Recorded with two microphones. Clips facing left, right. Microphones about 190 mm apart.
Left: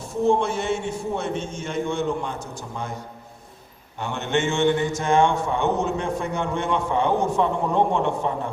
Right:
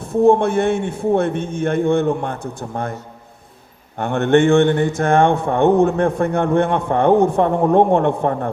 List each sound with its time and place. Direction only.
0.0 s a man's voice: 60° right (ahead or behind)
3.9 s a man's voice: 55° right (ahead or behind)